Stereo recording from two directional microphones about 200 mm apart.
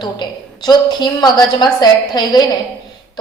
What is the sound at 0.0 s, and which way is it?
A woman's voice, 20° left (ahead or behind).